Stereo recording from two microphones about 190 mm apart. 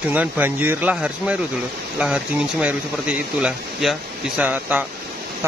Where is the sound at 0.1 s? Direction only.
10° right (ahead or behind).